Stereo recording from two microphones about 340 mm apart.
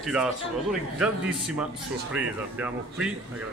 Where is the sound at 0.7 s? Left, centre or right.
Centre.